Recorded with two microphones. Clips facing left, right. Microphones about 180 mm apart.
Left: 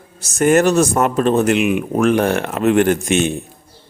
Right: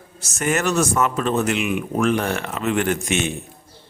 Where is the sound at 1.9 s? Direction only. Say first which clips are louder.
Left 5 dB; 45° left (ahead or behind).